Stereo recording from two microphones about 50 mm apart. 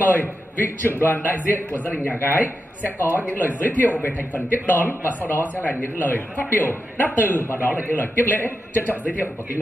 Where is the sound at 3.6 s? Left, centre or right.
Left.